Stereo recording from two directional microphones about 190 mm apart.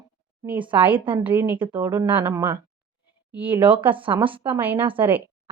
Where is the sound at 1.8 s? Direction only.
10° right (ahead or behind).